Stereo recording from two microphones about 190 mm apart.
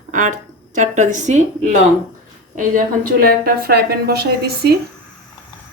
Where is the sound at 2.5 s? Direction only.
45° right (ahead or behind).